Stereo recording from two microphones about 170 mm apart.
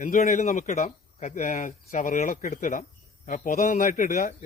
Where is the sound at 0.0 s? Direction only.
45° left (ahead or behind).